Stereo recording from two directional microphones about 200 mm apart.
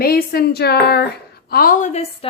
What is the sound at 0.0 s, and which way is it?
A woman's voice, 50° left (ahead or behind).